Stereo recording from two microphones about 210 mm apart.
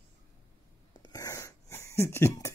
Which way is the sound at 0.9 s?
20° left (ahead or behind).